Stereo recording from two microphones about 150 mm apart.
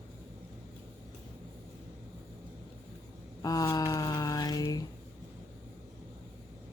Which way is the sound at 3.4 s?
25° left (ahead or behind).